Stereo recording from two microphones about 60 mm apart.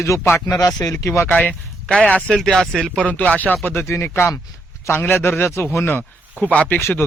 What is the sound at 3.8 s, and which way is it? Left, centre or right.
A man's voice, left.